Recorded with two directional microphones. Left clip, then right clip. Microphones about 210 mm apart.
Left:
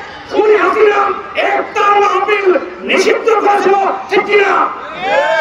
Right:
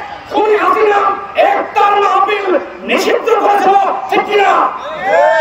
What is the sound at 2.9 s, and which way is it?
Crowd, 15° left (ahead or behind).